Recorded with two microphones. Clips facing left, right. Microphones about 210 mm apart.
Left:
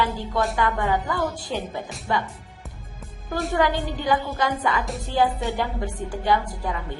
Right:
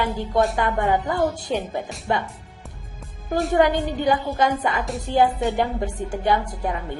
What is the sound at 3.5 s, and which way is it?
A woman's voice, 20° right (ahead or behind).